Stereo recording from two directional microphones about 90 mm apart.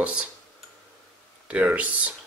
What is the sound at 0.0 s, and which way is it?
Speech, 15° right (ahead or behind).